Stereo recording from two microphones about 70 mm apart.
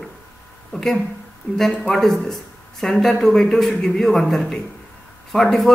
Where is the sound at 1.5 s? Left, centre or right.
Left.